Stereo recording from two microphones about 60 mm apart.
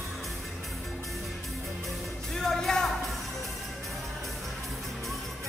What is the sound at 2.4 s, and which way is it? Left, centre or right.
Music, centre.